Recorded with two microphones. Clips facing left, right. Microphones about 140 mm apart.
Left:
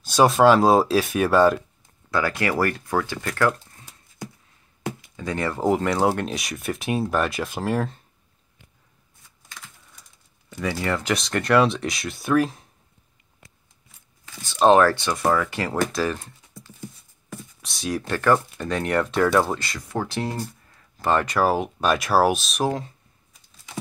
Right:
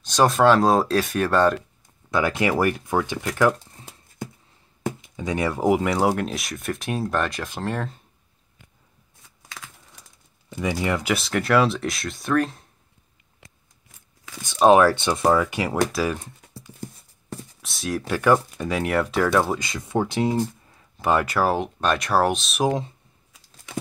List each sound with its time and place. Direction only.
0.0 s speech: 5° left (ahead or behind)
2.0 s speech: 20° right (ahead or behind)
5.0 s speech: 15° right (ahead or behind); by 7.9 s 5° left (ahead or behind)
10.5 s speech: 20° right (ahead or behind); by 12.6 s 5° left (ahead or behind)
14.4 s speech: 15° right (ahead or behind)
15.0 s speech: 25° right (ahead or behind); by 16.3 s 5° right (ahead or behind)
17.6 s speech: centre (ahead or behind)
19.6 s speech: 20° right (ahead or behind); by 22.6 s centre (ahead or behind)
22.6 s speech: 15° right (ahead or behind)